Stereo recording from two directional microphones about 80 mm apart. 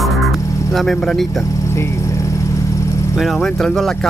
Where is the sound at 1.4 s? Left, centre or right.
Left.